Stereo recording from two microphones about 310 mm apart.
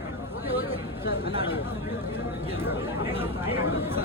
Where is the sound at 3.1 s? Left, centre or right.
Centre.